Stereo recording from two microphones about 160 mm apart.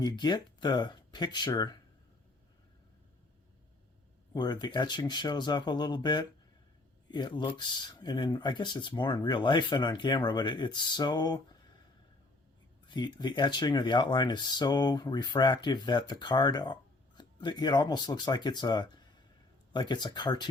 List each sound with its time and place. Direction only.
0.0 s speech: 25° left (ahead or behind)
4.4 s speech: 25° left (ahead or behind)
12.9 s speech: 25° left (ahead or behind)